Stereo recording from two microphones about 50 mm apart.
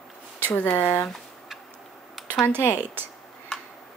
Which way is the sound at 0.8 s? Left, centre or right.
Left.